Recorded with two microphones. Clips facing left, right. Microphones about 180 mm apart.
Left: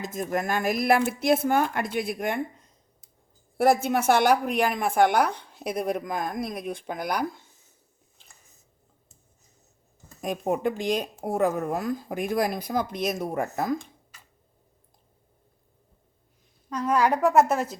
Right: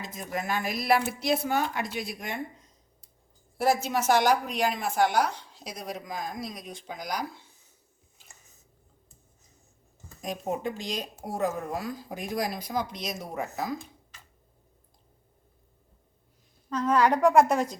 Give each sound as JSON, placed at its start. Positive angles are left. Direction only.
{"t": 0.0, "sound": "speech", "side_deg": 50}
{"t": 3.6, "sound": "a woman's voice", "side_deg": 55}
{"t": 10.2, "sound": "a woman's voice", "side_deg": 60}
{"t": 16.6, "sound": "a woman's voice", "side_deg": 10}